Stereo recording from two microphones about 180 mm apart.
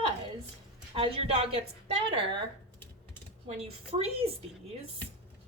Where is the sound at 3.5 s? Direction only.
35° right (ahead or behind).